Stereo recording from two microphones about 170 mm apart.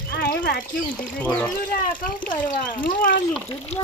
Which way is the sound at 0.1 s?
65° left (ahead or behind).